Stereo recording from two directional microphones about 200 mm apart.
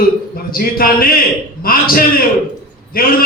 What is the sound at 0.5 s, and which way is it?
A man's voice, 45° left (ahead or behind).